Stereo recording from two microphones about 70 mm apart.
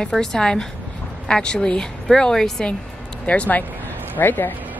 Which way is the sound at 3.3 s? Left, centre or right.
Left.